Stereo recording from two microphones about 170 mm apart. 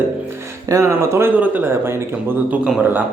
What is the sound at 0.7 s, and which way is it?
Speech, 15° right (ahead or behind).